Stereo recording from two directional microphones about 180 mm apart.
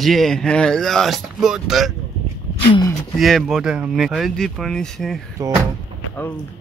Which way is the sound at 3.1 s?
Centre (ahead or behind).